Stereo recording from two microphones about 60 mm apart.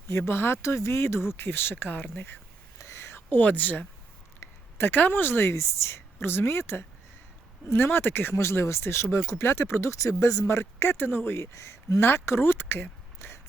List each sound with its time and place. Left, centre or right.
0.1 s speech: left
2.7 s whispering: left
4.4 s a sound: left
4.9 s speech: left
5.5 s speech: left
10.4 s speech: left
11.5 s speech: left